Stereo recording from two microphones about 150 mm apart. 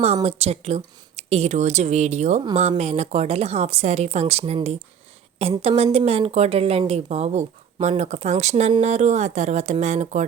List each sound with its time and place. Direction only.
0.0 s a woman's voice: 45° right (ahead or behind)